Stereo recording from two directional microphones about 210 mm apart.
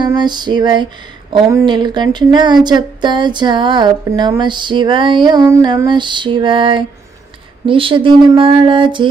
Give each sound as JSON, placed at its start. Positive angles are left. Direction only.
{"t": 0.0, "sound": "speech", "side_deg": -20}